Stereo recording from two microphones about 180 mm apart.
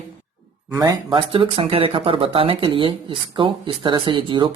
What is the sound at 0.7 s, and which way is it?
Speech, 20° right (ahead or behind).